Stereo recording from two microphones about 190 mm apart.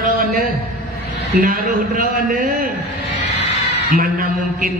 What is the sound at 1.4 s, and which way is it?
A man's voice, 45° right (ahead or behind).